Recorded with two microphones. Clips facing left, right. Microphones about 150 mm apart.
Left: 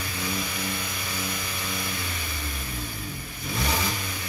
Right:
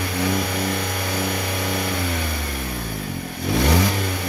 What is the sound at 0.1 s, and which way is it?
Vehicle, 70° right (ahead or behind).